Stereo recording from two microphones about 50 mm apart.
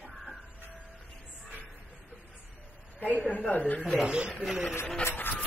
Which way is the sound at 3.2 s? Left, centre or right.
Left.